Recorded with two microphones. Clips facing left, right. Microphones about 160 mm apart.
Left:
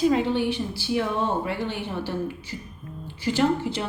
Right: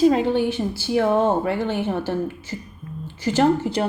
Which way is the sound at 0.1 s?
40° right (ahead or behind).